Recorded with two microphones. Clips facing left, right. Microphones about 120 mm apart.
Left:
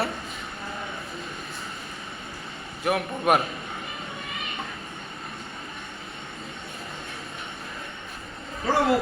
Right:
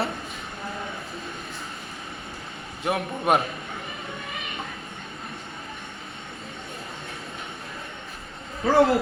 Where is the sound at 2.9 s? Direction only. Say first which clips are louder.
Even; 25° right (ahead or behind).